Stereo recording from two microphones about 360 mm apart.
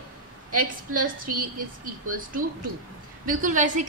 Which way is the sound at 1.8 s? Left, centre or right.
Right.